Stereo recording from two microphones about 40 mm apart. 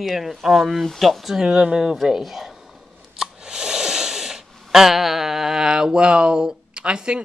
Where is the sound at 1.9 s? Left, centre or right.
Centre.